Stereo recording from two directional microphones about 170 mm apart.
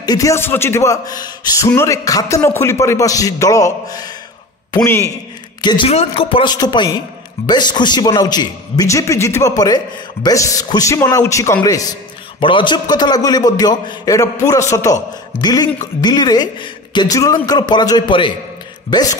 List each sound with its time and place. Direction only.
0.0 s a man's voice: 20° left (ahead or behind)
5.6 s a man's voice: 25° left (ahead or behind)